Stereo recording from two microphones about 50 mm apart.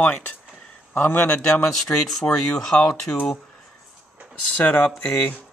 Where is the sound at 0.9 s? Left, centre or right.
Left.